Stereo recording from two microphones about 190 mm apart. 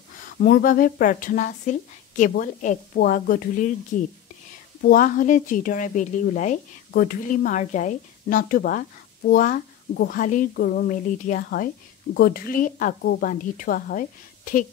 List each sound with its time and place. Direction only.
0.4 s speech: 50° left (ahead or behind)
4.8 s speech: 45° left (ahead or behind)